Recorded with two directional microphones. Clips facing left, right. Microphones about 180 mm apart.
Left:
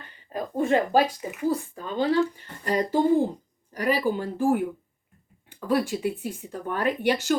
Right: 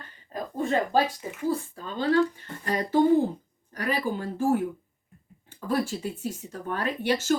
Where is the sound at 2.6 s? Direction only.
10° left (ahead or behind).